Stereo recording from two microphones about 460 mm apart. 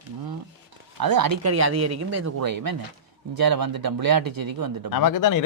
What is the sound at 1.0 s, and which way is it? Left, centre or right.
Speech, right.